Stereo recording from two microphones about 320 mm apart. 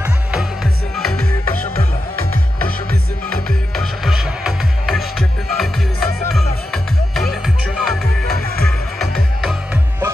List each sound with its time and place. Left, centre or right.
0.0 s music: centre
3.3 s music: centre